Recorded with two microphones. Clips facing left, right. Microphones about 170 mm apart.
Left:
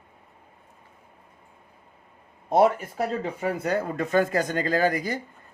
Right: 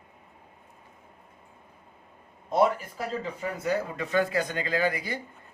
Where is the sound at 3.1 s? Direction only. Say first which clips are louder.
Left 5 dB; 60° left (ahead or behind).